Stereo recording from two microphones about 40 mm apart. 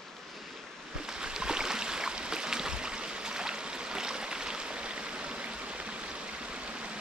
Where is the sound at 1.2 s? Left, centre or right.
Centre.